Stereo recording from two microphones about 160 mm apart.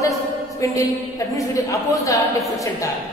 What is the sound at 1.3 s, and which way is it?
A man's voice, 20° left (ahead or behind).